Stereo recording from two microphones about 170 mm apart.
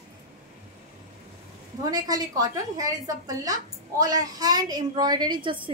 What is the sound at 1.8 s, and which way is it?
A woman's voice, 20° right (ahead or behind).